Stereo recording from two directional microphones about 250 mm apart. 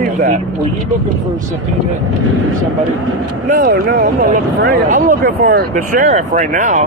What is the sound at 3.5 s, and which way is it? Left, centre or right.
Speech, right.